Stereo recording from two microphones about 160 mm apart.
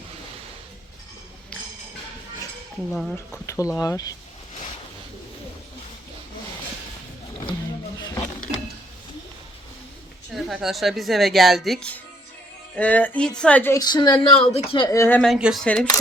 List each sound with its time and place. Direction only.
2.9 s a woman's voice: centre (ahead or behind)
3.4 s speech: 20° left (ahead or behind)
7.9 s a sound: 20° left (ahead or behind)
10.3 s a woman's voice: centre (ahead or behind)
13.8 s speech: 25° left (ahead or behind)
14.8 s speech: 15° left (ahead or behind)
15.2 s a woman's voice: centre (ahead or behind)